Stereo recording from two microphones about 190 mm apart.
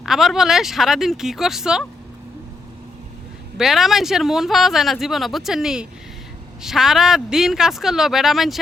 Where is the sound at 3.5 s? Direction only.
Centre (ahead or behind).